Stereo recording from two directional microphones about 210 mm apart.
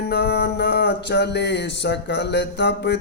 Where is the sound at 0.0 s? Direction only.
50° left (ahead or behind).